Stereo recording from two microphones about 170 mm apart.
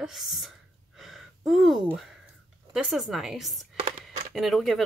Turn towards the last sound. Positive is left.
turn(degrees=0)  # may be behind; listen again after turning